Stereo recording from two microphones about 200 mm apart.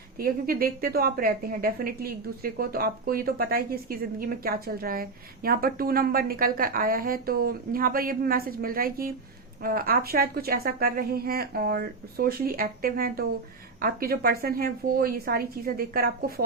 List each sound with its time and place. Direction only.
0.2 s a woman's voice: 45° right (ahead or behind)